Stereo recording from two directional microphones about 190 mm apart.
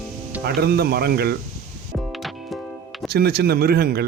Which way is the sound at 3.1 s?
55° right (ahead or behind).